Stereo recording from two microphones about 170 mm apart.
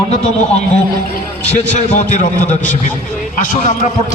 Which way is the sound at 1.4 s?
40° left (ahead or behind).